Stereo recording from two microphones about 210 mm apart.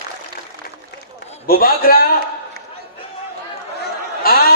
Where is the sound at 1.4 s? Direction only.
45° left (ahead or behind).